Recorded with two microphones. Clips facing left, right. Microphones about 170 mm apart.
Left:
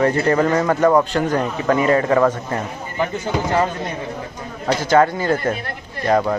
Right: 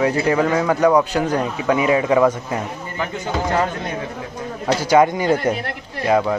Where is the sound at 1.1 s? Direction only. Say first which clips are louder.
Left 1 dB; 10° right (ahead or behind).